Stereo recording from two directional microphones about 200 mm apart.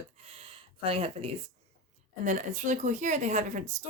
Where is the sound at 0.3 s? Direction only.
30° right (ahead or behind).